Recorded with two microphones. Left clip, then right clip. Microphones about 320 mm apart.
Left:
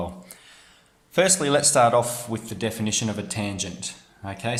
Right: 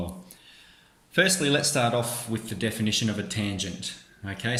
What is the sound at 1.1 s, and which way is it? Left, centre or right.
Speech, left.